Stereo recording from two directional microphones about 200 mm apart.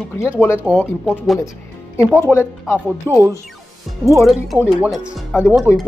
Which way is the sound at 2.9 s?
15° right (ahead or behind).